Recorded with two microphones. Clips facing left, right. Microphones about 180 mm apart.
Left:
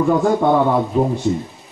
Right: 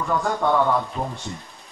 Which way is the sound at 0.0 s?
20° left (ahead or behind).